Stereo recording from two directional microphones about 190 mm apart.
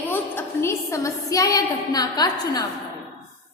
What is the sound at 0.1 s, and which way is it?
A woman's voice, 10° left (ahead or behind).